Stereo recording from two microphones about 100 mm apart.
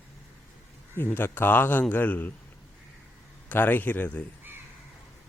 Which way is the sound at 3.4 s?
20° left (ahead or behind).